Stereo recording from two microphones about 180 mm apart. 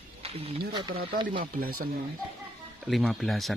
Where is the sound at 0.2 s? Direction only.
35° right (ahead or behind).